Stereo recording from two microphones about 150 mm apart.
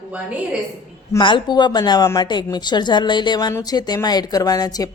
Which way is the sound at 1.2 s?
35° left (ahead or behind).